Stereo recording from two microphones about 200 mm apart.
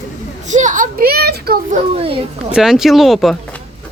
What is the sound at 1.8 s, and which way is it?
Speech, 30° right (ahead or behind).